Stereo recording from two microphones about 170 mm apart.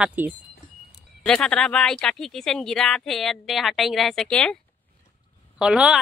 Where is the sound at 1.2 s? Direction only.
5° left (ahead or behind).